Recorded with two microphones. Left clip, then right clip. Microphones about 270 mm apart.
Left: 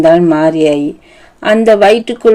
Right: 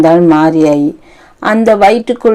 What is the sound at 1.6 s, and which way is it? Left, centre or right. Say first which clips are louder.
Speech: even; right.